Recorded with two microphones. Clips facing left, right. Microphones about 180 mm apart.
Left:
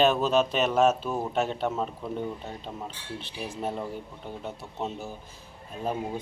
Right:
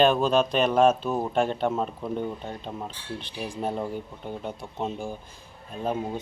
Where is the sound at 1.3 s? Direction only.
Centre (ahead or behind).